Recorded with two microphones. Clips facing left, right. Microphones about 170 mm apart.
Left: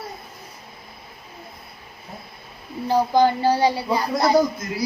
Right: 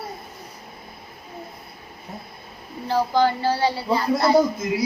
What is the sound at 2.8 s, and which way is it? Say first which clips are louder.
Speech: left 2 dB; 15° left (ahead or behind).